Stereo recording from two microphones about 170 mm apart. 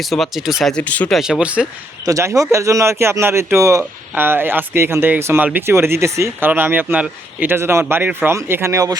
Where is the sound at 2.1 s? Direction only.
20° right (ahead or behind).